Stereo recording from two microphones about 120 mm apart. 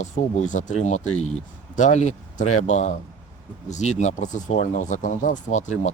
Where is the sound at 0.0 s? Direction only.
90° left.